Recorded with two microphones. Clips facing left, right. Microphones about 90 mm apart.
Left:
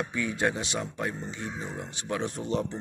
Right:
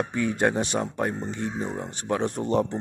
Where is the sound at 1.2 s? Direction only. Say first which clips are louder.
Right 6 dB; 50° right (ahead or behind).